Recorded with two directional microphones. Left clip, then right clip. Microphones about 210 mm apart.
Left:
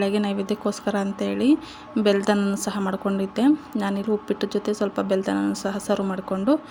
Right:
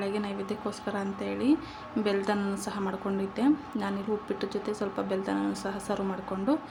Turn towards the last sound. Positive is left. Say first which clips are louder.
# left 7 dB
turn(degrees=30)  # may be behind; listen again after turning